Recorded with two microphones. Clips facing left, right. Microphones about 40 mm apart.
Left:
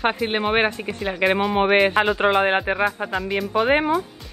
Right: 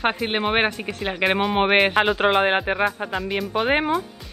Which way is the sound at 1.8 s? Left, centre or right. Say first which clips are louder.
Even; centre.